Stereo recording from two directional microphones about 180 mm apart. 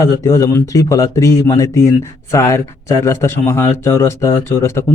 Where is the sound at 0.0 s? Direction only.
20° left (ahead or behind).